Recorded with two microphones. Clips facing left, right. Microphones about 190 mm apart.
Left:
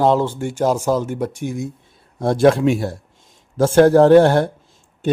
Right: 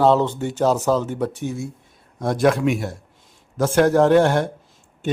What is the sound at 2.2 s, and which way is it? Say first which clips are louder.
Speech: left 4 dB; 30° left (ahead or behind).